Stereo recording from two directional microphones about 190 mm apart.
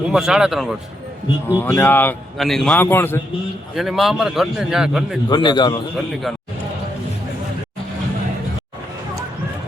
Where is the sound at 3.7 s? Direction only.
Centre (ahead or behind).